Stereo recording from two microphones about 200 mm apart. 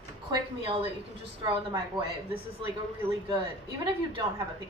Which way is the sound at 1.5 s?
25° right (ahead or behind).